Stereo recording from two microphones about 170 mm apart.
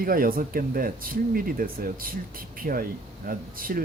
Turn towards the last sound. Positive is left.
turn(degrees=-55)  # may be behind; listen again after turning